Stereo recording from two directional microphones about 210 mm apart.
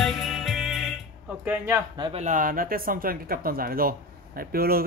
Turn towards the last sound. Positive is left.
turn(degrees=-45)  # may be behind; listen again after turning